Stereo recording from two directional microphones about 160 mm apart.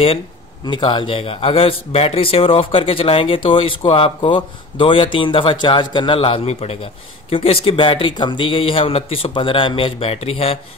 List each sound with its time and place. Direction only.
0.7 s a man's voice: 30° left (ahead or behind)